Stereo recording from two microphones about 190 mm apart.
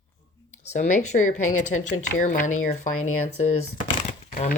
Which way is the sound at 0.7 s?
40° left (ahead or behind).